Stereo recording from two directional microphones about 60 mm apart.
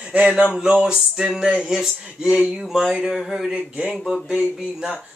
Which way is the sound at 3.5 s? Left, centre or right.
Centre.